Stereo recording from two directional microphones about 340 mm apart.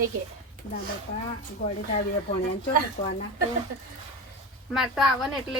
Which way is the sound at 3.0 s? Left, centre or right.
Left.